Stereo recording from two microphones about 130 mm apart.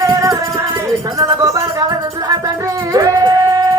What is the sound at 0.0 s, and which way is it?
Music, 25° right (ahead or behind).